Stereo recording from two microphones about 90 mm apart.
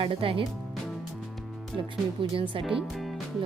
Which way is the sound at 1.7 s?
75° right (ahead or behind).